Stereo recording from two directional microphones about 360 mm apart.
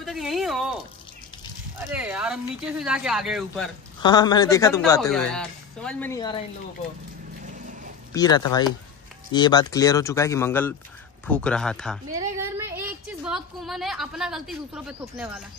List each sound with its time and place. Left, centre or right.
0.0 s a sound: centre
1.9 s speech: centre
4.0 s speech: centre
8.1 s a woman's voice: centre